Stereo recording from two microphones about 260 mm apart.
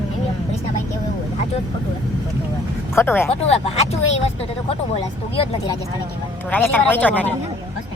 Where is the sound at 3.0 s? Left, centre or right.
Centre.